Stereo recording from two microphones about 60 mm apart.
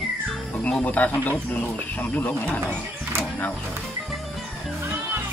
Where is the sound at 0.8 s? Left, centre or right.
Left.